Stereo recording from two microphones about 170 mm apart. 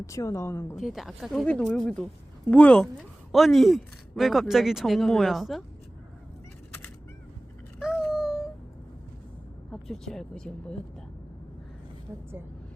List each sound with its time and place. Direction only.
0.0 s speech: 15° left (ahead or behind)
0.8 s a woman's voice: centre (ahead or behind)
7.8 s a sound: 5° right (ahead or behind)
9.8 s a woman's voice: centre (ahead or behind)